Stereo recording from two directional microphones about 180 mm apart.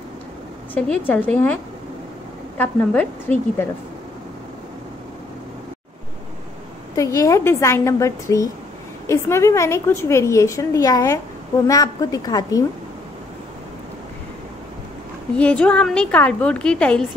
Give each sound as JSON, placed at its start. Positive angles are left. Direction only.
{"t": 0.7, "sound": "a woman's voice", "side_deg": 10}
{"t": 7.0, "sound": "a woman's voice", "side_deg": 20}
{"t": 15.3, "sound": "a woman's voice", "side_deg": 5}